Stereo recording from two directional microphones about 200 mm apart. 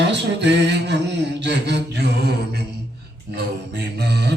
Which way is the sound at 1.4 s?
60° right (ahead or behind).